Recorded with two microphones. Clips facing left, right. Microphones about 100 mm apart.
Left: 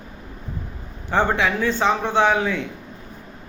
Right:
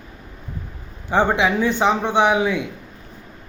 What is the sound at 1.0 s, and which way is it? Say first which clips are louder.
A man's voice: right 2 dB; 15° right (ahead or behind).